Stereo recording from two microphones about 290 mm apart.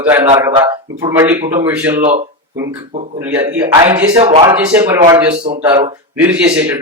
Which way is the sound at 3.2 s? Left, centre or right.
Centre.